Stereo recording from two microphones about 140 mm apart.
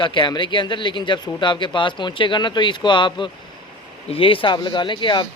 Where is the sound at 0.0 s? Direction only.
35° left (ahead or behind).